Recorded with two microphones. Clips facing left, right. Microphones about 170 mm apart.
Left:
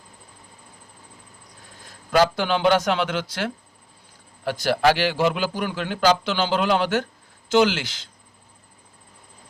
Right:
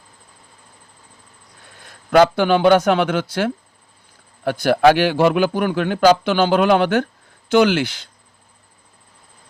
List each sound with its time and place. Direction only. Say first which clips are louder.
1.8 s a man's voice: right 6 dB; 60° right (ahead or behind)